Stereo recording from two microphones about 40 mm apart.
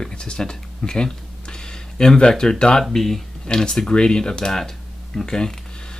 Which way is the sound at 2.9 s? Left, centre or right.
Centre.